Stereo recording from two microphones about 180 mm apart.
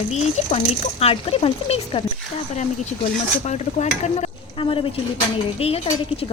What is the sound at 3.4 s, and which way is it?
Speech, 40° left (ahead or behind).